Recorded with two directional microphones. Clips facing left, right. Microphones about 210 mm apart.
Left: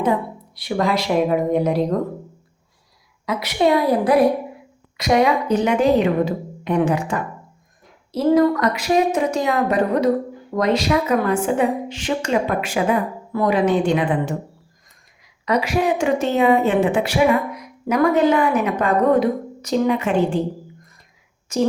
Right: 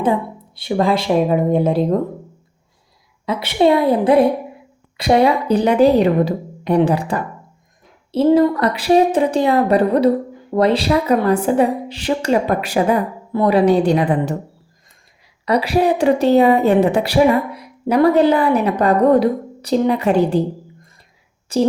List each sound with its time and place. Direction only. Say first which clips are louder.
0.0 s a woman's voice: right 2 dB; 25° right (ahead or behind)
3.2 s a woman's voice: right 3 dB; 30° right (ahead or behind)
15.4 s a woman's voice: right 3 dB; 35° right (ahead or behind)
21.5 s a woman's voice: right 3 dB; 35° right (ahead or behind)